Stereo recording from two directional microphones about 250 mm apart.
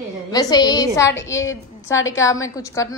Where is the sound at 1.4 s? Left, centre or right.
Left.